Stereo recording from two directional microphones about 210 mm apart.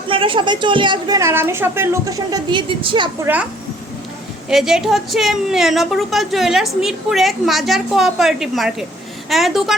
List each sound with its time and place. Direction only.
0.1 s a woman's voice: 25° right (ahead or behind)
4.4 s a woman's voice: centre (ahead or behind)